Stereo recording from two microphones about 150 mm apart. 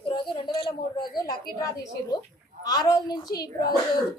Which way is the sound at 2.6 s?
25° left (ahead or behind).